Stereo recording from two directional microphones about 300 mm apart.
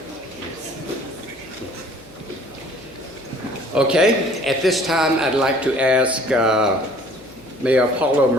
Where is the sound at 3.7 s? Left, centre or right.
Centre.